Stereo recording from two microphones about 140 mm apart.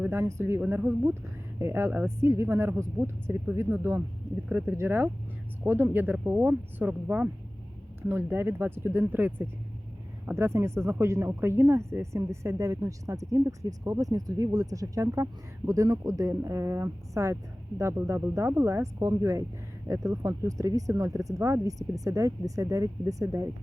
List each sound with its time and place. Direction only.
0.0 s a woman's voice: 15° right (ahead or behind)